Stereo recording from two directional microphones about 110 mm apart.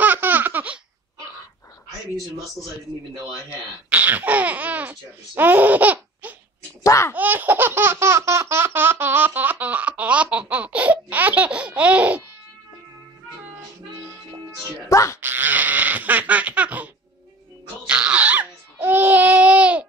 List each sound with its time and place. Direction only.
0.0 s baby laughter: 15° right (ahead or behind)
3.4 s speech: 15° right (ahead or behind)
6.8 s a child's voice: 25° left (ahead or behind)
7.2 s baby laughter: 15° right (ahead or behind)
14.9 s a sound: 30° left (ahead or behind)
15.1 s baby laughter: 20° right (ahead or behind)
17.8 s crying: 10° right (ahead or behind)